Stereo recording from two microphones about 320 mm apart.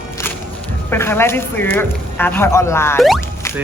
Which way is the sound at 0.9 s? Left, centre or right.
Centre.